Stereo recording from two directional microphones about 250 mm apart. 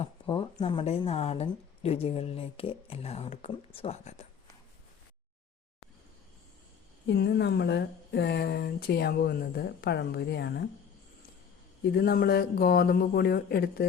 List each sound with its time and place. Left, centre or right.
0.0 s a sound: left
0.6 s a woman's voice: left
7.1 s speech: left
11.8 s speech: left